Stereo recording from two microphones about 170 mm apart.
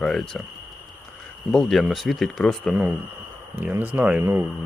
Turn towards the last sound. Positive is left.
turn(degrees=-15)  # may be behind; listen again after turning